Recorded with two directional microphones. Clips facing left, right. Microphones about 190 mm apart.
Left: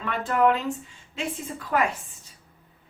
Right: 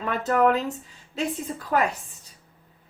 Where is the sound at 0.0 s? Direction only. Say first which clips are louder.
Right 1 dB; 40° right (ahead or behind).